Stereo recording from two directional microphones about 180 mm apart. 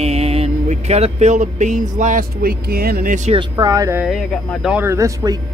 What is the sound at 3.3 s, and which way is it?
Speech, 20° right (ahead or behind).